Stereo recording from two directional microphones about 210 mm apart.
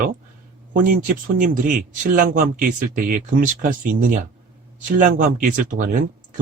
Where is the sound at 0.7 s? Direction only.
40° right (ahead or behind).